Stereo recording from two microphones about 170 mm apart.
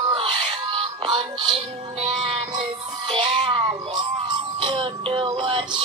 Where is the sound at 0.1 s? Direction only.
30° right (ahead or behind).